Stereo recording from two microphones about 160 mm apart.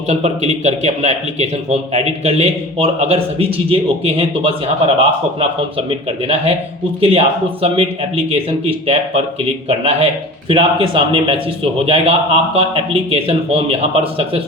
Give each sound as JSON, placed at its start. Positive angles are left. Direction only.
{"t": 0.1, "sound": "speech", "side_deg": -45}